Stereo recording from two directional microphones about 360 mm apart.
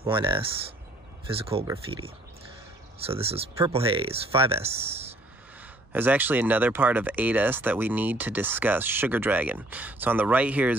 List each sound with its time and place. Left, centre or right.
0.0 s speech: centre
5.9 s speech: centre